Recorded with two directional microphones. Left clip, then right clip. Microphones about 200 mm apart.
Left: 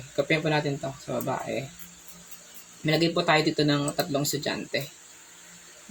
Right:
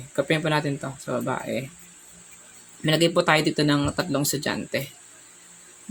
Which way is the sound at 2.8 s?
35° right (ahead or behind).